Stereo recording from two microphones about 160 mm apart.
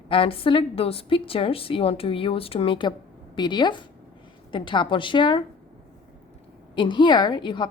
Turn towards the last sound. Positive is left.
turn(degrees=30)  # may be behind; listen again after turning